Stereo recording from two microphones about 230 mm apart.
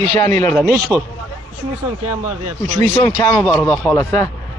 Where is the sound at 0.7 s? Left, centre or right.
Right.